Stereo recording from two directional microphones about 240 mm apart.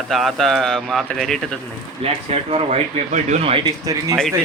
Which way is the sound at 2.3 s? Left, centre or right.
Right.